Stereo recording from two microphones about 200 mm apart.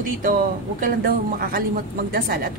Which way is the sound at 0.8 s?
45° right (ahead or behind).